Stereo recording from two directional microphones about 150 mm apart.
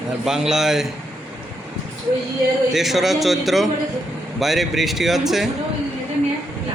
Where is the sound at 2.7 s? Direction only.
Centre (ahead or behind).